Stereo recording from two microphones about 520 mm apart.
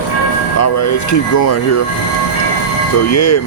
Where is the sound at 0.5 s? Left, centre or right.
Left.